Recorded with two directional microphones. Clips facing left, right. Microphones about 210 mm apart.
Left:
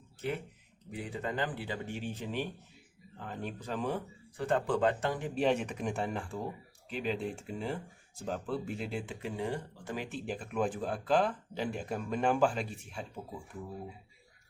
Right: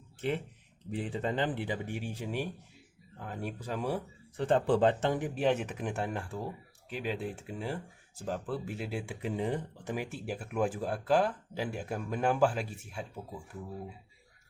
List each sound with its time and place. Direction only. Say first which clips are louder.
0.9 s speech: right 4 dB; 30° right (ahead or behind); by 4.0 s 10° right (ahead or behind)
4.4 s speech: right 4 dB; 30° right (ahead or behind)
5.3 s speech: even; 5° right (ahead or behind)